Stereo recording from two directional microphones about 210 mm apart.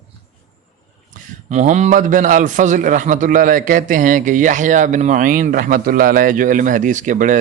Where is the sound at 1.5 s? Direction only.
35° right (ahead or behind).